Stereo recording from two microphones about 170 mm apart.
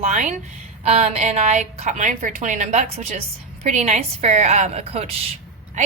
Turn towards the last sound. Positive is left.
turn(degrees=-40)  # may be behind; listen again after turning